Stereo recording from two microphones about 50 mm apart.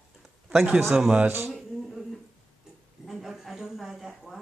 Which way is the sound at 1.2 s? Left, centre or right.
Right.